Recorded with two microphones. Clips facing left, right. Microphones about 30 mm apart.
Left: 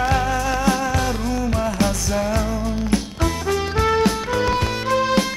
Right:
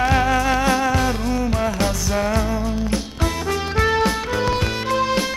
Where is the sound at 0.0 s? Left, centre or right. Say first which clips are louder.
Right 2 dB; right.